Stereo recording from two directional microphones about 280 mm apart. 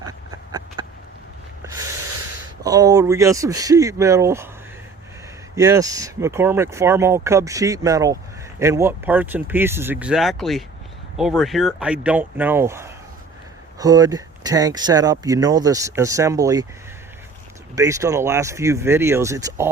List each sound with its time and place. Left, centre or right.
0.0 s a sound: centre
2.6 s speech: centre
5.5 s speech: centre
17.7 s speech: centre